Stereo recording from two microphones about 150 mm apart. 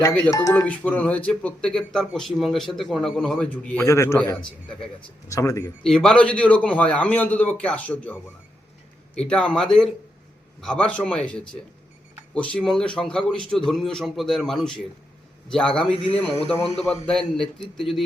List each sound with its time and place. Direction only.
0.3 s speech: 20° left (ahead or behind)
0.7 s speech: 10° left (ahead or behind)
5.8 s a man's voice: 5° left (ahead or behind)
16.1 s a man's voice: 40° left (ahead or behind)
17.1 s a man's voice: 5° left (ahead or behind)